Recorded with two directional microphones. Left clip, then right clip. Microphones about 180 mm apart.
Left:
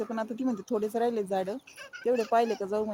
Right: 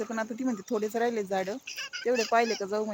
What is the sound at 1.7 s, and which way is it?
Speech, 55° left (ahead or behind).